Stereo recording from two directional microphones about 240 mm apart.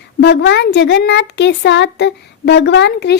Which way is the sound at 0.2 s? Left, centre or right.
Left.